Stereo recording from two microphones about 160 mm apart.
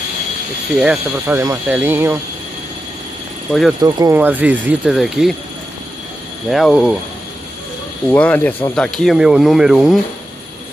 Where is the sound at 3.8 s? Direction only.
25° right (ahead or behind).